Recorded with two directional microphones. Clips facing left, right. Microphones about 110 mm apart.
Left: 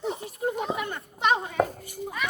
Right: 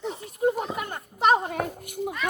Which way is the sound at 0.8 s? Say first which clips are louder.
Right 2 dB; 40° right (ahead or behind).